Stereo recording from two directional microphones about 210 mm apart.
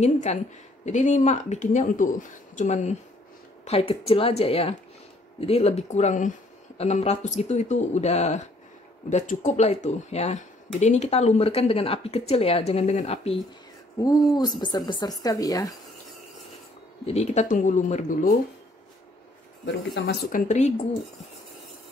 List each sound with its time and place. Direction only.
0.0 s speech: 30° left (ahead or behind)
13.9 s speech: 20° left (ahead or behind)
17.0 s speech: 30° left (ahead or behind)
19.6 s speech: 55° left (ahead or behind); by 20.7 s 35° left (ahead or behind)